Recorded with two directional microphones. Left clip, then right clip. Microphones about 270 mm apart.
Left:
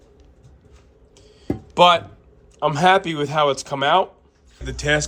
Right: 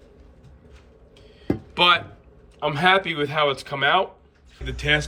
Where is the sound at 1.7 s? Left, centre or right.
Centre.